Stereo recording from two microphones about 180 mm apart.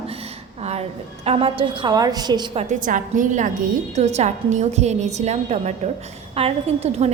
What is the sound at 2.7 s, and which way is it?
A woman's voice, 45° right (ahead or behind).